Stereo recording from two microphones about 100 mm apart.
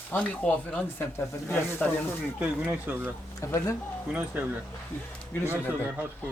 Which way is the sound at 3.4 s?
30° left (ahead or behind).